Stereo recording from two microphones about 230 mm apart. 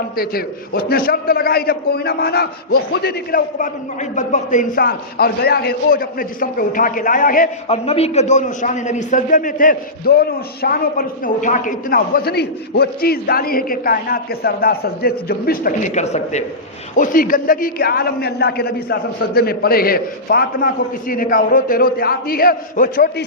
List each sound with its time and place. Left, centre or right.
0.2 s a man's voice: left